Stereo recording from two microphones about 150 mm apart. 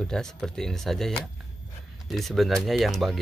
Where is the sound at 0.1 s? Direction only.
5° left (ahead or behind).